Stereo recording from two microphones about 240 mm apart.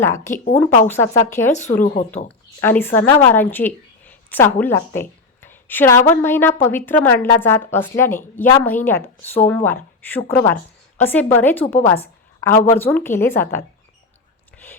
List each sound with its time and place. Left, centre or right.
0.0 s a woman's voice: centre
1.5 s speech: left
2.0 s a woman's voice: centre